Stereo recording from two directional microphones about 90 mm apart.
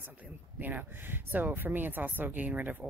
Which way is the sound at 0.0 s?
20° right (ahead or behind).